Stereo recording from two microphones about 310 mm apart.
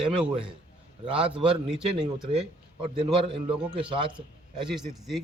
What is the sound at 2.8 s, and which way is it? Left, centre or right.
Speech, centre.